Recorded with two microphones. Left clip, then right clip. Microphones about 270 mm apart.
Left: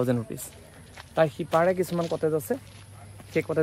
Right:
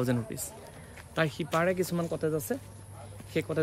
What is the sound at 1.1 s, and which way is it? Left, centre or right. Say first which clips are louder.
Speech: left 6 dB; centre.